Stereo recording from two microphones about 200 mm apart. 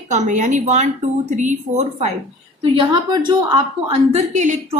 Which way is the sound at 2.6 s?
25° right (ahead or behind).